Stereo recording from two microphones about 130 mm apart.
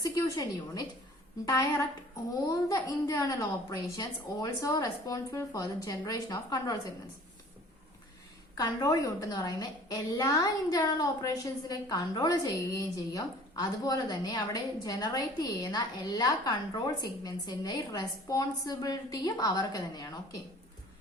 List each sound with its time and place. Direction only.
0.0 s a woman's voice: 25° left (ahead or behind)
8.5 s a woman's voice: 30° left (ahead or behind)